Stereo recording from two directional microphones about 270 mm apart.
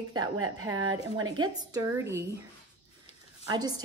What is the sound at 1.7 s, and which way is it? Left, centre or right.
Speech, centre.